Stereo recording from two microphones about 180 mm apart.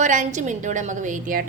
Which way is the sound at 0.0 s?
45° right (ahead or behind).